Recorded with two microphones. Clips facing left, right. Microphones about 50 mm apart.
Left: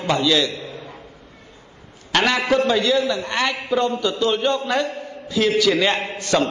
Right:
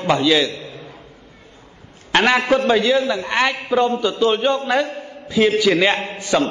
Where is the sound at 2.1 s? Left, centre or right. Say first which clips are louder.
Right 3 dB; right.